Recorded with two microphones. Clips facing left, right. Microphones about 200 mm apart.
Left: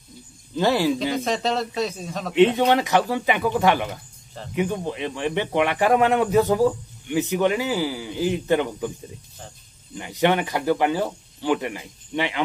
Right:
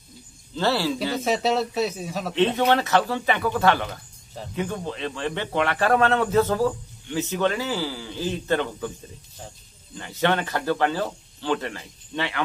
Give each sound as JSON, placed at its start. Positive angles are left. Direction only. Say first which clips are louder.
{"t": 0.6, "sound": "a man's voice", "louder": "left 3 dB", "side_deg": 15}
{"t": 1.2, "sound": "a man's voice", "louder": "right 1 dB", "side_deg": -5}
{"t": 2.3, "sound": "a man's voice", "louder": "left 4 dB", "side_deg": 15}
{"t": 9.9, "sound": "a man's voice", "louder": "left 3 dB", "side_deg": 15}